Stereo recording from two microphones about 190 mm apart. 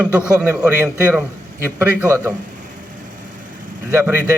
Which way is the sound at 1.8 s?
5° right (ahead or behind).